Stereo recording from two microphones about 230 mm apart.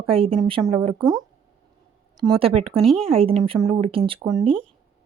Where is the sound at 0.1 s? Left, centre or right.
Right.